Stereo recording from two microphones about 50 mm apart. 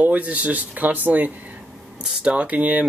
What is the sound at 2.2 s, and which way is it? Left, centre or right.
Speech, right.